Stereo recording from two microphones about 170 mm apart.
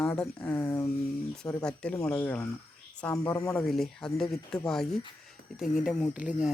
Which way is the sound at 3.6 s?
Centre (ahead or behind).